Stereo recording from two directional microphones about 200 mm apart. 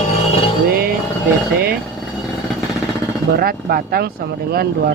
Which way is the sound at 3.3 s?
50° right (ahead or behind).